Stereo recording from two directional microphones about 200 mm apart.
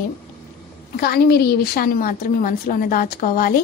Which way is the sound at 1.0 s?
50° left (ahead or behind).